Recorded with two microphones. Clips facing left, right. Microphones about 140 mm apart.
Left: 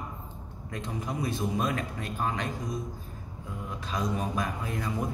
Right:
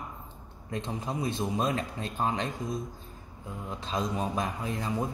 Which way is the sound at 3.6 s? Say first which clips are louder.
Even; 25° right (ahead or behind).